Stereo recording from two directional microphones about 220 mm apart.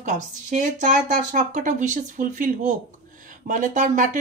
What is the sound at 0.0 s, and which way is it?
Speech, 35° right (ahead or behind).